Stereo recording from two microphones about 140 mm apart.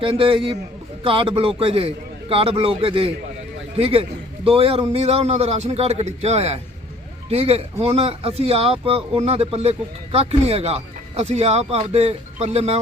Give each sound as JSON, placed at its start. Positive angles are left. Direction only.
{"t": 0.0, "sound": "a man's voice", "side_deg": -40}